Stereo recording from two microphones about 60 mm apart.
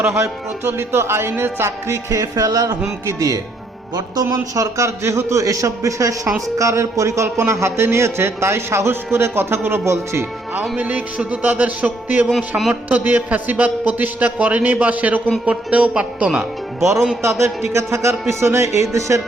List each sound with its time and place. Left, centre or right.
0.6 s speech: right
3.2 s speech: right
4.5 s a man's voice: right
10.6 s a man's voice: right
12.3 s a man's voice: centre
12.9 s a man's voice: right
17.2 s speech: right